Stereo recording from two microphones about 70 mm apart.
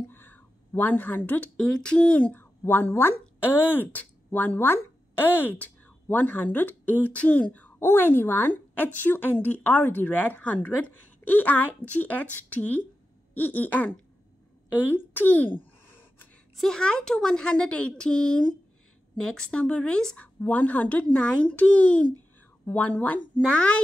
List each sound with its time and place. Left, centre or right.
0.1 s a sound: left
1.6 s a woman's voice: centre
2.3 s speech: left
7.8 s a woman's voice: left
16.5 s a woman's voice: centre
20.2 s a woman's voice: left